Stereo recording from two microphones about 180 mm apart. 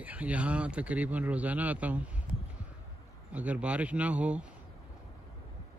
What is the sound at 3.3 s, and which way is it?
Mantra, 10° right (ahead or behind).